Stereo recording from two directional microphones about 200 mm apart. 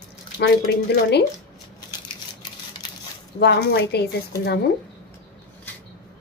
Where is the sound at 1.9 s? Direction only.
20° left (ahead or behind).